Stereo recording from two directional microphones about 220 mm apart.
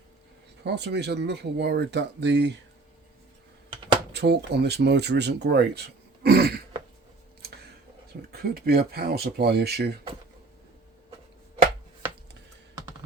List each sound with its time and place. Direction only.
0.6 s speech: 50° right (ahead or behind)
4.1 s speech: 50° right (ahead or behind)
8.3 s speech: 45° right (ahead or behind)